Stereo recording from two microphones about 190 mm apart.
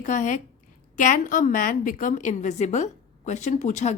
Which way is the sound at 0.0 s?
40° left (ahead or behind).